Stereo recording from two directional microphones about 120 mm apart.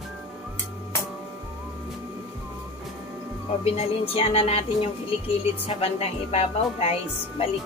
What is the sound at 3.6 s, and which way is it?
A woman's voice, 55° left (ahead or behind).